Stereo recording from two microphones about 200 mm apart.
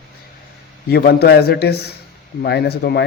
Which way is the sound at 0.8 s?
55° left (ahead or behind).